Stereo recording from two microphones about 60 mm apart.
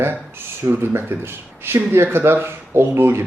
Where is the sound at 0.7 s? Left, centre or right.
Right.